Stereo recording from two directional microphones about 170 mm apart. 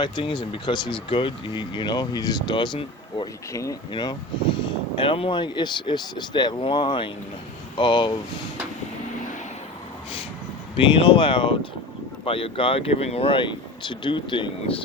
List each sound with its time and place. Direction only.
0.0 s speech: 30° left (ahead or behind)
10.8 s speech: 30° left (ahead or behind)